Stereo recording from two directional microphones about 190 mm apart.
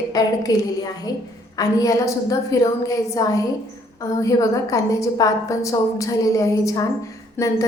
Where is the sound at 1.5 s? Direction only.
20° left (ahead or behind).